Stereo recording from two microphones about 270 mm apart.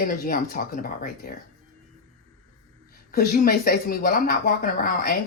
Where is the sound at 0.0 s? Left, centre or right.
Left.